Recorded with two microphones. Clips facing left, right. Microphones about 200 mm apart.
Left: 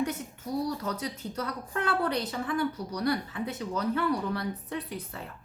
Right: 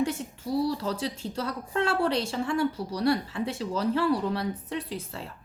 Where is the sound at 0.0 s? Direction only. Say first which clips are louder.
Right 3 dB; 30° right (ahead or behind).